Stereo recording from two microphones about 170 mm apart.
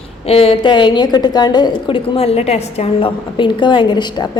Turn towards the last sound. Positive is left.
turn(degrees=25)  # may be behind; listen again after turning